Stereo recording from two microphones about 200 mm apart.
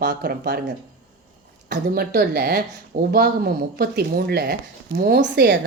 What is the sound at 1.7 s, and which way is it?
A woman's voice, 50° right (ahead or behind).